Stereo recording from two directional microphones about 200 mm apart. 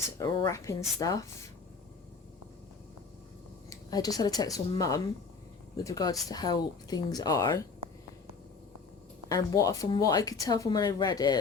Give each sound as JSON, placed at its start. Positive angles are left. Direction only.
{"t": 0.2, "sound": "speech", "side_deg": 15}
{"t": 3.7, "sound": "speech", "side_deg": 20}
{"t": 9.3, "sound": "speech", "side_deg": 15}